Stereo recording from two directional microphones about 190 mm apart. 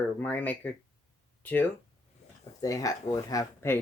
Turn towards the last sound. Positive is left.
turn(degrees=15)  # may be behind; listen again after turning